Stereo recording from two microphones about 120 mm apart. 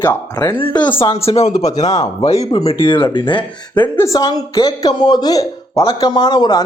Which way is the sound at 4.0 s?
30° left (ahead or behind).